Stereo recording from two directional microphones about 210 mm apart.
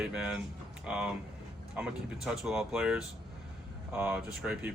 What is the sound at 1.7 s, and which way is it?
Speech, 5° right (ahead or behind).